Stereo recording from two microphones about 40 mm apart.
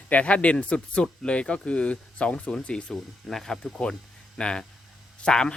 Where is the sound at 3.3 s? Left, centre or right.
Centre.